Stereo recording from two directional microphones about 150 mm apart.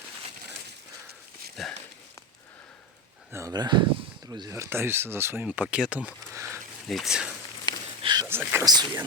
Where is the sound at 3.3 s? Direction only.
20° right (ahead or behind).